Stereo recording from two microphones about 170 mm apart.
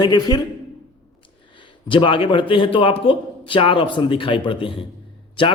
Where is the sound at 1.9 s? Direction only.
30° left (ahead or behind).